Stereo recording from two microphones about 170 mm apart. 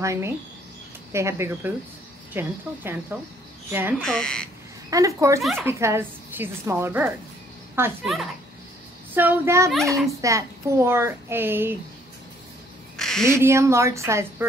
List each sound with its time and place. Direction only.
0.0 s a child's voice: 15° right (ahead or behind)
4.0 s speech: 5° left (ahead or behind)
4.8 s speech: 20° right (ahead or behind)
5.4 s speech: centre (ahead or behind)
5.7 s a child's voice: 15° right (ahead or behind)
9.1 s a child's voice: 10° right (ahead or behind)
12.9 s duck: 5° left (ahead or behind)
13.3 s a child's voice: 15° right (ahead or behind)